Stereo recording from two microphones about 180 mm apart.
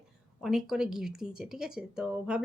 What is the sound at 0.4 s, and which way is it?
Speech, centre (ahead or behind).